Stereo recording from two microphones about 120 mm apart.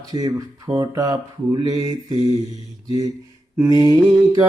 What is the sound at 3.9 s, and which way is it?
Mantra, 30° right (ahead or behind).